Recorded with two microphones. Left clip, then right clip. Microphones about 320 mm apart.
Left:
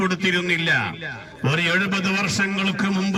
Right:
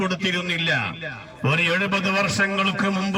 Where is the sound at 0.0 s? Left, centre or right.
Centre.